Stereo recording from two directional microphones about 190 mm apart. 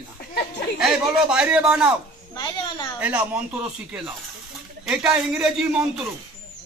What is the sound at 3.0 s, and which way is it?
Speech, 10° right (ahead or behind).